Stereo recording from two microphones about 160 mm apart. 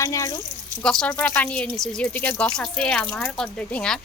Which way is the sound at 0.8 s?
5° left (ahead or behind).